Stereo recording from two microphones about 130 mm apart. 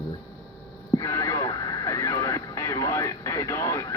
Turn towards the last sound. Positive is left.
turn(degrees=25)  # may be behind; listen again after turning